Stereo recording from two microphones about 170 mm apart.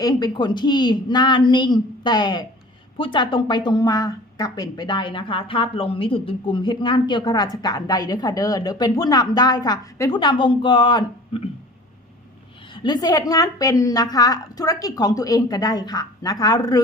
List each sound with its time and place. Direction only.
0.0 s a woman's voice: 25° left (ahead or behind)
12.7 s a woman's voice: 25° left (ahead or behind)